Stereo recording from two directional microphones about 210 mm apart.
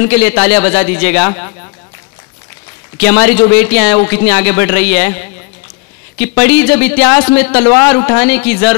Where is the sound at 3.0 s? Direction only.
10° left (ahead or behind).